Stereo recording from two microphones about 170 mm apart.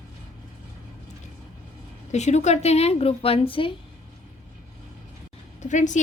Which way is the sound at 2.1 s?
40° left (ahead or behind).